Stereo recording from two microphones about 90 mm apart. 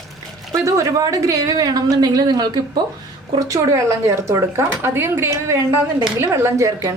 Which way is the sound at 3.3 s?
35° right (ahead or behind).